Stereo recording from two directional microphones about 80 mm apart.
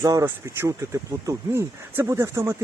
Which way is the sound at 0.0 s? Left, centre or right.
Right.